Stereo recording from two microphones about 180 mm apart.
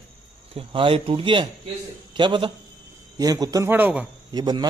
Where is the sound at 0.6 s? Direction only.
30° right (ahead or behind); by 4.1 s 10° right (ahead or behind).